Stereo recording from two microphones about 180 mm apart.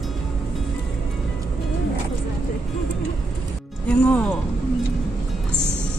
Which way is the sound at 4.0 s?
5° left (ahead or behind).